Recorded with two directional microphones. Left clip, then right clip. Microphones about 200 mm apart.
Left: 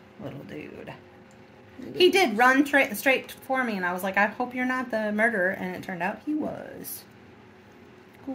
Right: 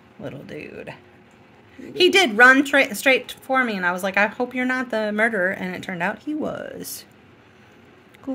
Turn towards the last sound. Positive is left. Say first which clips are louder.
# right 5 dB
turn(degrees=-40)  # may be behind; listen again after turning